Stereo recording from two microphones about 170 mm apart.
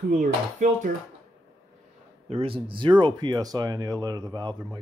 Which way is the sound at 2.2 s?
35° right (ahead or behind).